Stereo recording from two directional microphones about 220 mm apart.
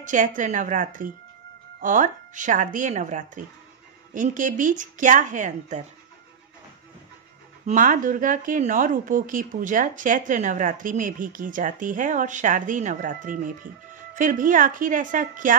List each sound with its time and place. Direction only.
0.0 s a woman's voice: 35° right (ahead or behind)
7.6 s a woman's voice: 35° right (ahead or behind)